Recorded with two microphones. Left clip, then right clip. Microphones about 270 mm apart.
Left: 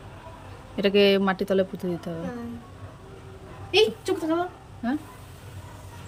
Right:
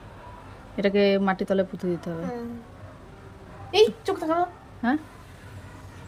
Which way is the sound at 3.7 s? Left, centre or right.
Centre.